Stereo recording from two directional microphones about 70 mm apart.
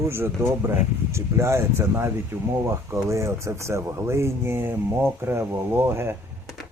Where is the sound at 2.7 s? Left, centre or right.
Right.